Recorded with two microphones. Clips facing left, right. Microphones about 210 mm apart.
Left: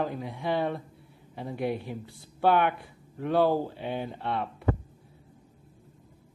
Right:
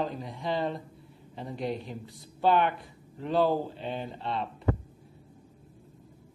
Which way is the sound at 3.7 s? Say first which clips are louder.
Left 2 dB; 10° left (ahead or behind).